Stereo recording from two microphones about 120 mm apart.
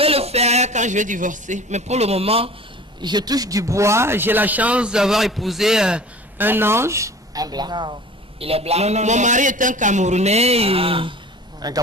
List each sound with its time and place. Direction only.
0.0 s a man's voice: 55° right (ahead or behind)
3.0 s speech: 35° right (ahead or behind)
11.6 s speech: 35° right (ahead or behind)